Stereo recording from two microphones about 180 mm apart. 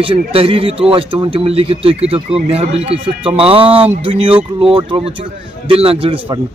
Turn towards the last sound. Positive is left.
turn(degrees=-30)  # may be behind; listen again after turning